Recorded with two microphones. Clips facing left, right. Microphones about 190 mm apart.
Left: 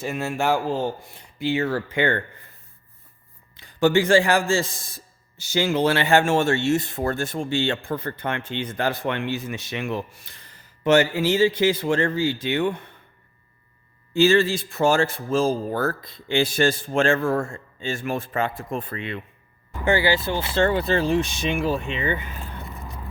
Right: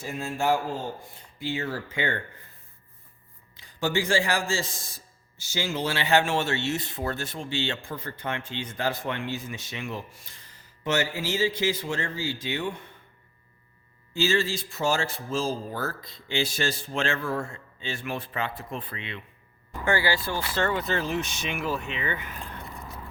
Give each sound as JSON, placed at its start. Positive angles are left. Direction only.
{"t": 0.0, "sound": "speech", "side_deg": 75}
{"t": 3.6, "sound": "speech", "side_deg": 60}
{"t": 14.1, "sound": "speech", "side_deg": 60}
{"t": 19.8, "sound": "speech", "side_deg": 20}